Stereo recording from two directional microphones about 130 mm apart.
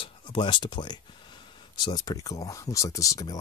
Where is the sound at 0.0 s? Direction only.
40° left (ahead or behind).